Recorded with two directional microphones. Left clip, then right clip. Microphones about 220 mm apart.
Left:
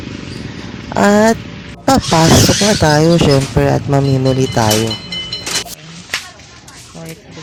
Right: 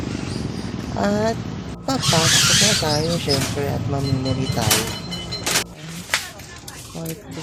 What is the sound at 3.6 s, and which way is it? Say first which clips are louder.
Speech: left 11 dB; 40° left (ahead or behind).